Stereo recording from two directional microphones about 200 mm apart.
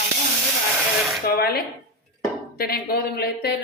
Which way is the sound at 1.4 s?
50° left (ahead or behind).